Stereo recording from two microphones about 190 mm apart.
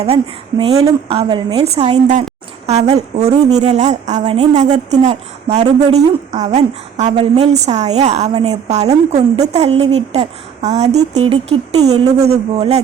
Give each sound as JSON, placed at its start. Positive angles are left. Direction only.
{"t": 0.6, "sound": "a woman's voice", "side_deg": -30}